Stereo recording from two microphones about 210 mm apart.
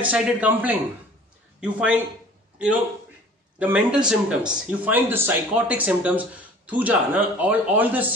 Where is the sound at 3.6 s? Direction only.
5° right (ahead or behind).